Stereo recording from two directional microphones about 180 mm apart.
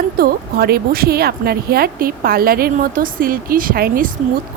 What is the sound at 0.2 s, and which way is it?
Speech, 60° right (ahead or behind).